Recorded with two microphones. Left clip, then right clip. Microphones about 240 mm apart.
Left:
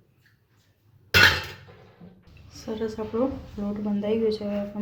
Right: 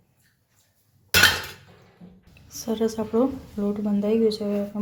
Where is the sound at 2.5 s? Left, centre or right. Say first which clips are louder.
Right 5 dB; right.